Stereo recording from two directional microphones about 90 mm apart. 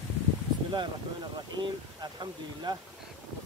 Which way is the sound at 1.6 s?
55° right (ahead or behind).